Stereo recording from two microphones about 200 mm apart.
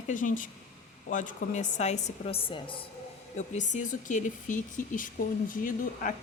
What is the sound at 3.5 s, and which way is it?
Speech, 40° left (ahead or behind).